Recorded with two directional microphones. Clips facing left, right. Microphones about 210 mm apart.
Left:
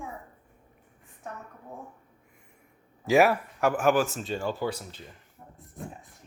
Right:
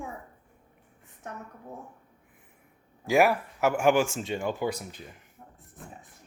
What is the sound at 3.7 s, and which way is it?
Speech, 10° right (ahead or behind).